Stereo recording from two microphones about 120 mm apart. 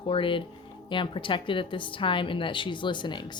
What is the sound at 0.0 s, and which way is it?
A woman's voice, 50° left (ahead or behind).